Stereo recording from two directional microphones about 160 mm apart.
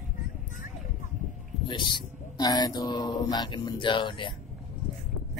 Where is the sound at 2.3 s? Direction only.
25° left (ahead or behind).